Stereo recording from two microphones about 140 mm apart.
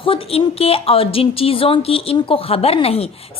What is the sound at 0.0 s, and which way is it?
A woman's voice, 40° left (ahead or behind).